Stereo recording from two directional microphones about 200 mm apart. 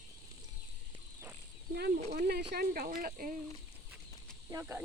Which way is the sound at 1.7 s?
45° right (ahead or behind).